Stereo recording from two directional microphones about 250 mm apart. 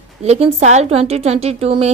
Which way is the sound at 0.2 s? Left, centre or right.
Right.